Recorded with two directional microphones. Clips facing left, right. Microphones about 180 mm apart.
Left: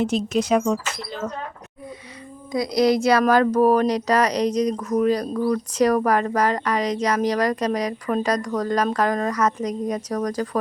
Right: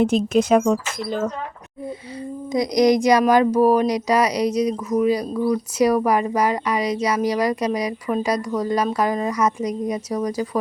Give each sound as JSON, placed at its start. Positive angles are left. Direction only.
{"t": 0.0, "sound": "speech", "side_deg": -55}
{"t": 2.5, "sound": "speech", "side_deg": -20}